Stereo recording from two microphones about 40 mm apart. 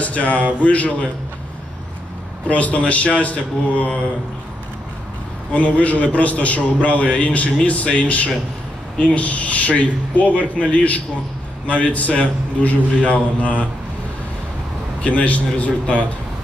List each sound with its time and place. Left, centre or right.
0.0 s a man's voice: left
2.4 s a man's voice: left
5.5 s a man's voice: left
15.0 s a man's voice: left